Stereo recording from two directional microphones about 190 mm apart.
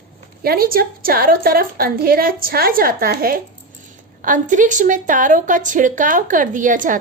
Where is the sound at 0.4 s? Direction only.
50° right (ahead or behind).